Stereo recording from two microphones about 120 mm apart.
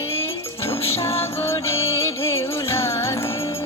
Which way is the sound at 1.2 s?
20° left (ahead or behind).